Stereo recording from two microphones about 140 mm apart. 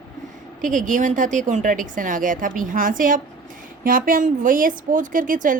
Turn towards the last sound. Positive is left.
turn(degrees=-70)  # may be behind; listen again after turning